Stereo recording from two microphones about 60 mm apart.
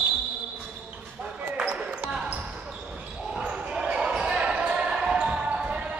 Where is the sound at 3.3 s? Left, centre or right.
Centre.